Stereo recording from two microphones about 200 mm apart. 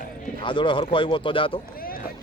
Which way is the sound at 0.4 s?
25° left (ahead or behind).